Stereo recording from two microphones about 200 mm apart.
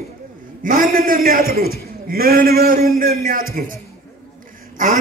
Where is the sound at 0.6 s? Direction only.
40° right (ahead or behind).